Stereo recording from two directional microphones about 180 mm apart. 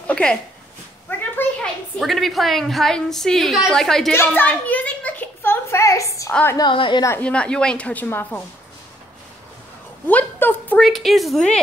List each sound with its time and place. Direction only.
0.0 s a sound: 5° left (ahead or behind)
1.4 s a woman's voice: centre (ahead or behind)
4.4 s a sound: 10° left (ahead or behind)
6.3 s a woman's voice: 10° left (ahead or behind)
6.6 s a woman's voice: 25° left (ahead or behind)
7.1 s a woman's voice: 5° left (ahead or behind)
10.0 s a woman's voice: 10° left (ahead or behind)